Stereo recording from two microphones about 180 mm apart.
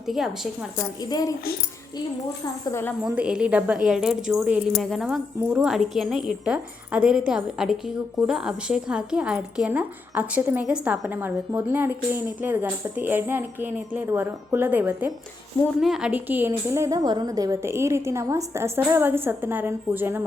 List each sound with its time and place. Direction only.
0.1 s speech: centre (ahead or behind)
1.0 s a woman's voice: 20° left (ahead or behind)
2.6 s speech: 15° left (ahead or behind)
3.0 s a woman's voice: 5° right (ahead or behind)